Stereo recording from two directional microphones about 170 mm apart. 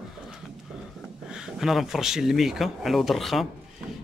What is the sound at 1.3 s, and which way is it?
A man's voice, centre (ahead or behind).